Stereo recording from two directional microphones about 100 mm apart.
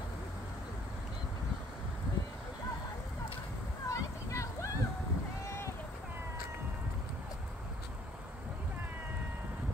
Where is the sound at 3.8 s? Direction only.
30° left (ahead or behind).